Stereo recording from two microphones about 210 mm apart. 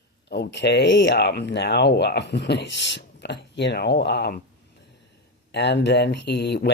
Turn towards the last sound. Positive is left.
turn(degrees=55)  # may be behind; listen again after turning